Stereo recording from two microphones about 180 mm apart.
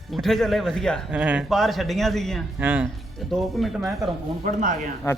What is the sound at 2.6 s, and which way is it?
Speech, 10° right (ahead or behind).